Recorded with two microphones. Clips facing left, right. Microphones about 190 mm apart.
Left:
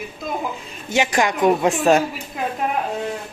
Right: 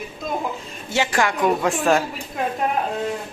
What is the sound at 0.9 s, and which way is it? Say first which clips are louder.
Speech: left 2 dB; 20° left (ahead or behind).